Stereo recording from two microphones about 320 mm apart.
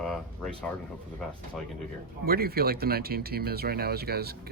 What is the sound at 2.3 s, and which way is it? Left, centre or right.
Speech, right.